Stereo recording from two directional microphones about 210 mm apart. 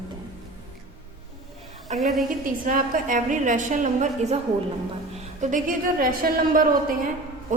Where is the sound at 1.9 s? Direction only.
35° right (ahead or behind).